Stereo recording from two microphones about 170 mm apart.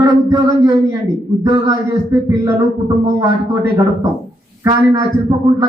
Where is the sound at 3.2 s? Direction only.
20° right (ahead or behind).